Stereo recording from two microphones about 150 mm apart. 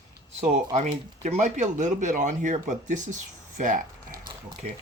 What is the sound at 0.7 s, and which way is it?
Speech, 50° right (ahead or behind).